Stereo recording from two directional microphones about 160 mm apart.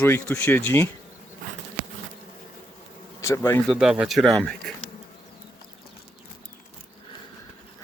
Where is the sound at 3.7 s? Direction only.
5° right (ahead or behind).